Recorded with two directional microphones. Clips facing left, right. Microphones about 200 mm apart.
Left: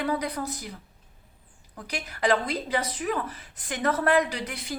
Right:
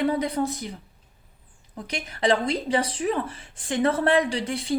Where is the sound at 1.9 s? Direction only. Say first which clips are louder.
Right 2 dB; 25° right (ahead or behind).